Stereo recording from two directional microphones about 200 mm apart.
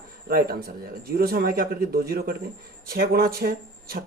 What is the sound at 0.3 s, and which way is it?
Speech, 45° right (ahead or behind).